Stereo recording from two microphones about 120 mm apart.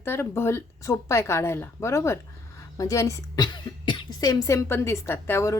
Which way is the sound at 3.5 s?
40° left (ahead or behind).